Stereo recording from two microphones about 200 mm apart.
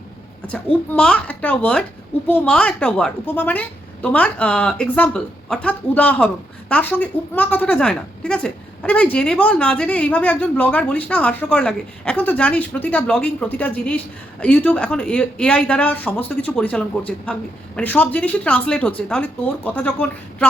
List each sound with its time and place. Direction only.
0.4 s a child's voice: 5° left (ahead or behind)